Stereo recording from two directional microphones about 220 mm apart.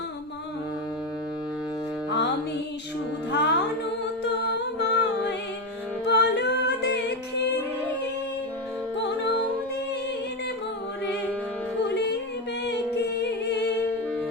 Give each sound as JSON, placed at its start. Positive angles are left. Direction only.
{"t": 2.0, "sound": "music", "side_deg": 50}
{"t": 3.3, "sound": "music", "side_deg": 50}
{"t": 4.2, "sound": "humming", "side_deg": 50}
{"t": 6.1, "sound": "music", "side_deg": 50}
{"t": 12.6, "sound": "singing", "side_deg": 50}